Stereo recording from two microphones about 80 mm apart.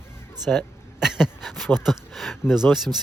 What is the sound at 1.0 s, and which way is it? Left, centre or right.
Speech, centre.